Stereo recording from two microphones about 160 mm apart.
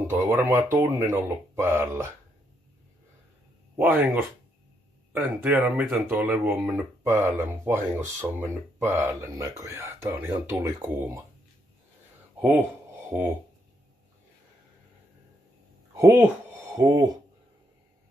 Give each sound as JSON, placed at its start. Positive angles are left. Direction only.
{"t": 0.0, "sound": "speech", "side_deg": -15}
{"t": 3.7, "sound": "speech", "side_deg": -10}
{"t": 12.4, "sound": "speech", "side_deg": -10}
{"t": 15.9, "sound": "speech", "side_deg": -15}